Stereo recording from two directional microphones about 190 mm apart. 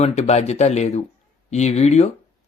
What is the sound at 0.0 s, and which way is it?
Speech, 35° left (ahead or behind).